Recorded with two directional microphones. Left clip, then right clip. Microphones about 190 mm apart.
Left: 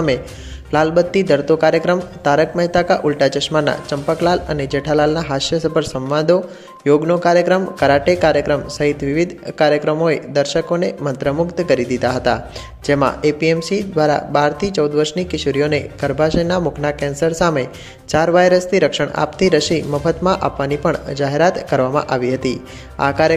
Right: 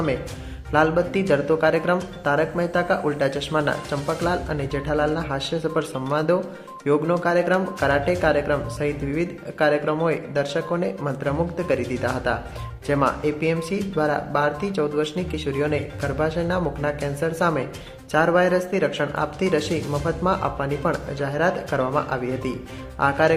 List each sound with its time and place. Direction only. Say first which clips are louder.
0.7 s speech: left 5 dB; 25° left (ahead or behind)